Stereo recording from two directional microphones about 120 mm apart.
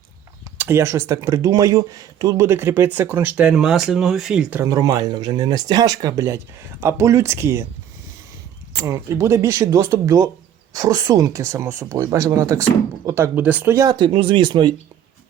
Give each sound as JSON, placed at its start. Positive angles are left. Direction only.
{"t": 0.6, "sound": "speech", "side_deg": -20}
{"t": 2.5, "sound": "speech", "side_deg": -20}
{"t": 4.6, "sound": "speech", "side_deg": -30}
{"t": 8.8, "sound": "speech", "side_deg": -25}
{"t": 13.7, "sound": "speech", "side_deg": -35}
{"t": 14.1, "sound": "speech", "side_deg": -45}